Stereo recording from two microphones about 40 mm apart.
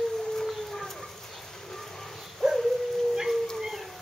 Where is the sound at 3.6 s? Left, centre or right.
Centre.